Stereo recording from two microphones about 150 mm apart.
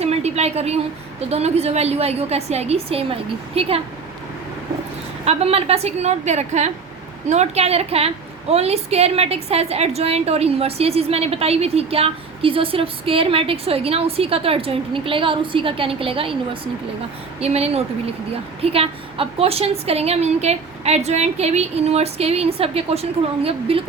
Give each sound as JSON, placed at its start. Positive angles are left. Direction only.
{"t": 0.0, "sound": "a sound", "side_deg": -45}
{"t": 1.3, "sound": "a woman's voice", "side_deg": -45}
{"t": 5.2, "sound": "a woman's voice", "side_deg": -40}
{"t": 17.4, "sound": "a woman's voice", "side_deg": -45}